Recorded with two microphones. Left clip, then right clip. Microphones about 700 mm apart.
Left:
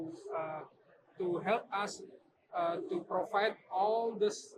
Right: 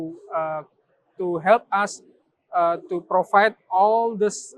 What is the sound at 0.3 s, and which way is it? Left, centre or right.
Speech, right.